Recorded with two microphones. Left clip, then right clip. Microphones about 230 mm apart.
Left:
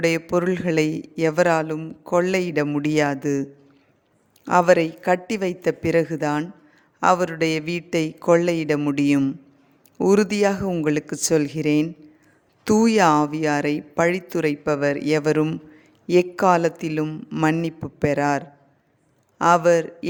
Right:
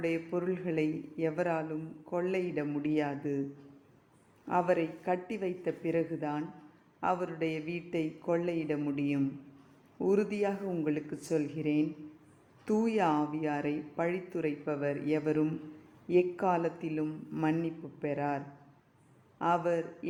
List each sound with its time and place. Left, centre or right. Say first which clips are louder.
0.0 s speech: left 12 dB; left
4.4 s speech: left 13 dB; left